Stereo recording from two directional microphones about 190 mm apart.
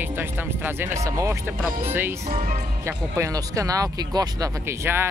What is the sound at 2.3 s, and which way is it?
Speech, 40° right (ahead or behind).